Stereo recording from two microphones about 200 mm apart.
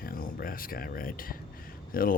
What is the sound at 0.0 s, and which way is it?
Speech, 45° left (ahead or behind).